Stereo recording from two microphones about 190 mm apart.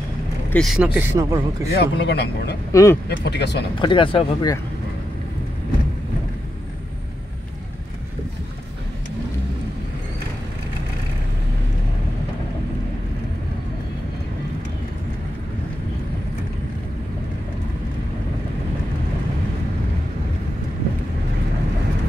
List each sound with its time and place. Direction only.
0.5 s speech: centre (ahead or behind)
1.1 s a man's voice: 15° right (ahead or behind)
1.7 s speech: 60° left (ahead or behind)
2.7 s speech: 15° left (ahead or behind)
3.1 s speech: 60° left (ahead or behind)
3.8 s speech: 25° left (ahead or behind)